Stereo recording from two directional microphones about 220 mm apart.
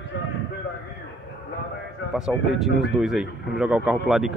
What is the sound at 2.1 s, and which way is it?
Speech, centre (ahead or behind).